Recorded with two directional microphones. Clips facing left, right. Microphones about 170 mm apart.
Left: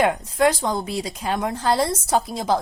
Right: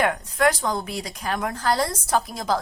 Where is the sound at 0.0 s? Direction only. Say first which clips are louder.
Left 3 dB; 25° left (ahead or behind).